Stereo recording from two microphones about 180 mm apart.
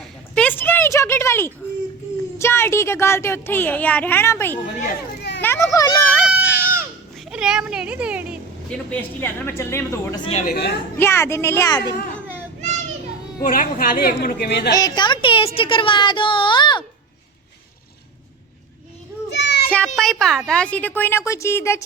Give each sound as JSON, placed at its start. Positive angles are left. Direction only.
{"t": 0.3, "sound": "a sound", "side_deg": 10}
{"t": 2.4, "sound": "a child's voice", "side_deg": 15}
{"t": 6.2, "sound": "a sound", "side_deg": -5}
{"t": 7.3, "sound": "a child's voice", "side_deg": -5}
{"t": 8.7, "sound": "speech", "side_deg": 10}
{"t": 10.4, "sound": "speech", "side_deg": 60}
{"t": 10.9, "sound": "speech", "side_deg": 15}
{"t": 13.4, "sound": "a woman's voice", "side_deg": 50}
{"t": 14.8, "sound": "speech", "side_deg": 20}
{"t": 19.3, "sound": "children playing", "side_deg": 75}
{"t": 20.0, "sound": "speech", "side_deg": 0}